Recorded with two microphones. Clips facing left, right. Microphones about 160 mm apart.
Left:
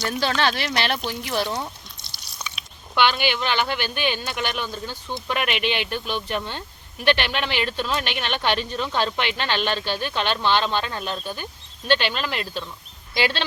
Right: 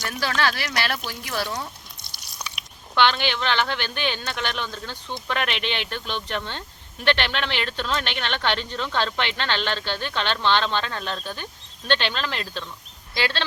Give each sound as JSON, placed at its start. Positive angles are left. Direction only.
{"t": 0.0, "sound": "speech", "side_deg": 25}
{"t": 2.9, "sound": "speech", "side_deg": 10}